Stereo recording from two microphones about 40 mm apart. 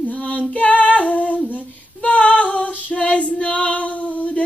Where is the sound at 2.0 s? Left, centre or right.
Left.